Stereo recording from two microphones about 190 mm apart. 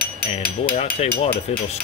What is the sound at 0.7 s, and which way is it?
Speech, 30° left (ahead or behind).